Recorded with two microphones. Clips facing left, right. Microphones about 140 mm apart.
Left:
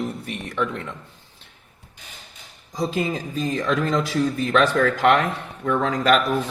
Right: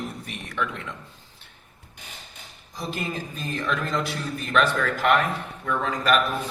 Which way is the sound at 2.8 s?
90° left.